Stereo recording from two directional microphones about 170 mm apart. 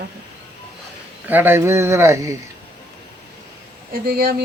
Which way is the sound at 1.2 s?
10° right (ahead or behind).